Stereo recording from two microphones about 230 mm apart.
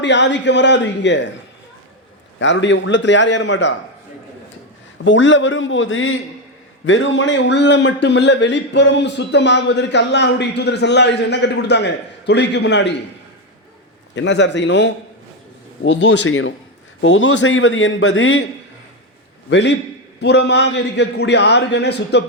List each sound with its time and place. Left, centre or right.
0.0 s a man's voice: left
2.4 s a man's voice: left
5.0 s a man's voice: left
14.2 s a man's voice: left
19.5 s a man's voice: left